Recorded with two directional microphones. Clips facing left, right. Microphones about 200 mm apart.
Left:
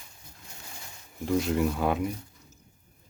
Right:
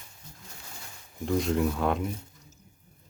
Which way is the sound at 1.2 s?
Centre (ahead or behind).